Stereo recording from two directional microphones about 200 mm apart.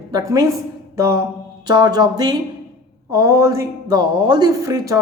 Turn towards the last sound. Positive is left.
turn(degrees=-15)  # may be behind; listen again after turning